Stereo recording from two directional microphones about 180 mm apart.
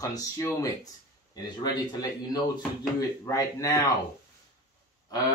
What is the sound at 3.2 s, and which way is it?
Speech, 20° left (ahead or behind).